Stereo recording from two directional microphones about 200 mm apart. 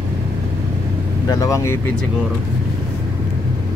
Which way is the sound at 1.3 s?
15° left (ahead or behind).